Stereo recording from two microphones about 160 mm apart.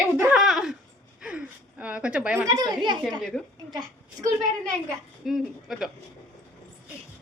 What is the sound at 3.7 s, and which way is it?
Speech, 30° right (ahead or behind).